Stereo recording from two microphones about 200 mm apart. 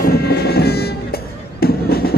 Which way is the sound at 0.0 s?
50° left (ahead or behind).